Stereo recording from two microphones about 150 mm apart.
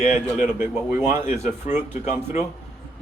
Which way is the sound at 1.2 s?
45° left (ahead or behind).